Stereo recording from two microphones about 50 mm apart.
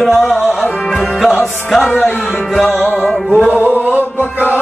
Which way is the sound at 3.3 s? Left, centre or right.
Right.